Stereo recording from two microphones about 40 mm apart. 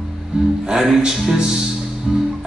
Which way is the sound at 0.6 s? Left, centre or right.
Centre.